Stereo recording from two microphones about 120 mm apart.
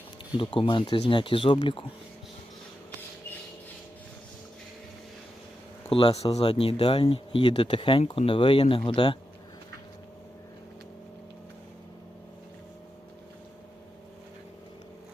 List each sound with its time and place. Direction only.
0.3 s speech: 45° left (ahead or behind)
5.9 s speech: 55° left (ahead or behind)